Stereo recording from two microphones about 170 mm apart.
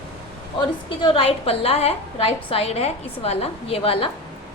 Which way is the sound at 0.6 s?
30° left (ahead or behind).